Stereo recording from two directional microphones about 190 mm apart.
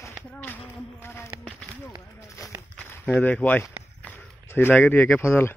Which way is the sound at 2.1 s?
15° left (ahead or behind).